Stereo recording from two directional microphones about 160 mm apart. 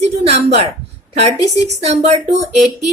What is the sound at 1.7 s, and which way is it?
Speech, 45° right (ahead or behind).